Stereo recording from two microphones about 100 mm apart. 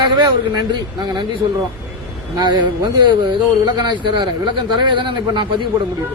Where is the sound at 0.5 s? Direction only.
45° right (ahead or behind).